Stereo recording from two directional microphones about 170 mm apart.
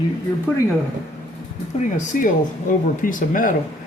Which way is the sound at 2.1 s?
55° left (ahead or behind).